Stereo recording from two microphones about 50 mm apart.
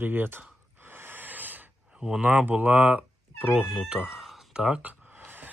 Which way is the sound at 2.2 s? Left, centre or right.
Right.